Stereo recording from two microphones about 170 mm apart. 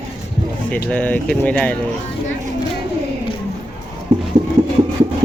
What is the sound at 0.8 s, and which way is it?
Speech, 10° left (ahead or behind).